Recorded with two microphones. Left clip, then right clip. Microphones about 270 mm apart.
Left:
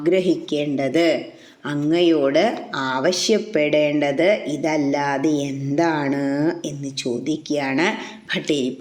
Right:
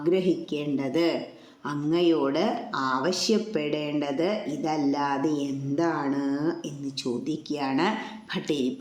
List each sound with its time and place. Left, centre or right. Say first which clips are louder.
0.0 s speech: left 6 dB; centre